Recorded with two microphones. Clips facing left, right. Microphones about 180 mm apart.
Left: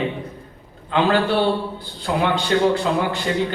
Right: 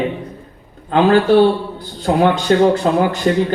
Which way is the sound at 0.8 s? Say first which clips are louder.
Right 6 dB; 50° right (ahead or behind).